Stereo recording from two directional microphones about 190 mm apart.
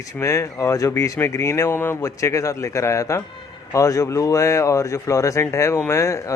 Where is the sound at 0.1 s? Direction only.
15° left (ahead or behind).